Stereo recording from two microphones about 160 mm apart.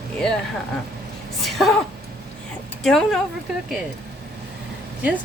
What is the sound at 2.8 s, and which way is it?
Speech, centre (ahead or behind).